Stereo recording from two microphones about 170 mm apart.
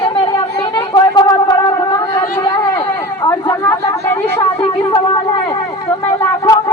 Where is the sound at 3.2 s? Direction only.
20° left (ahead or behind).